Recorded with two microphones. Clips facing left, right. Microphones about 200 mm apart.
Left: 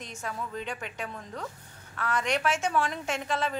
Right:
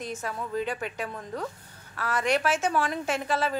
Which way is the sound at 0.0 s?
5° right (ahead or behind).